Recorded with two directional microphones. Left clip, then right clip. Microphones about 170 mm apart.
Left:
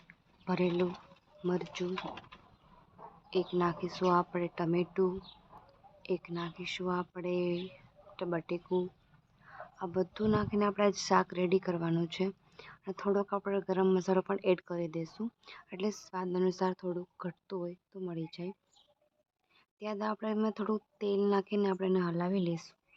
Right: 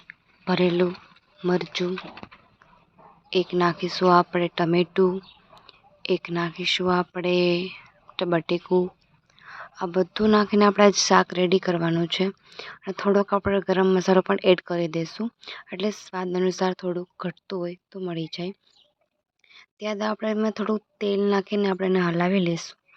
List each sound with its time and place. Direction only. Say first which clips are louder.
0.1 s a sound: right 11 dB; 30° right (ahead or behind)
1.4 s speech: right 10 dB; 30° right (ahead or behind)
3.2 s speech: right 10 dB; 30° right (ahead or behind)